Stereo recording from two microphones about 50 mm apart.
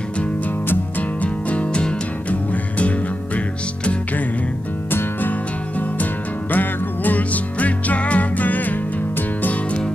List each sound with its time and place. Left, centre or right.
1.2 s music: left
6.5 s music: left